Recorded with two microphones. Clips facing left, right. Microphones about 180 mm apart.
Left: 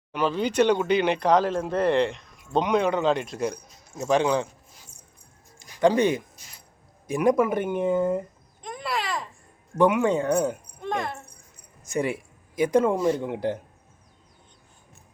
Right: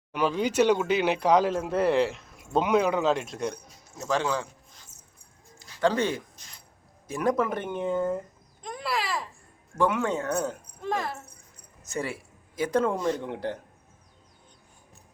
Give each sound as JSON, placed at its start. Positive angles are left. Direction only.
{"t": 0.1, "sound": "speech", "side_deg": -10}
{"t": 3.9, "sound": "speech", "side_deg": 20}
{"t": 5.5, "sound": "music", "side_deg": 15}
{"t": 7.1, "sound": "speech", "side_deg": 15}
{"t": 8.6, "sound": "babbling", "side_deg": 0}
{"t": 9.7, "sound": "speech", "side_deg": 15}
{"t": 10.8, "sound": "a sound", "side_deg": -5}
{"t": 11.8, "sound": "speech", "side_deg": 15}